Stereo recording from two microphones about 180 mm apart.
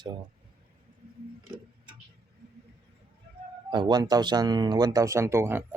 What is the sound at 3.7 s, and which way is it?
Speech, 25° right (ahead or behind).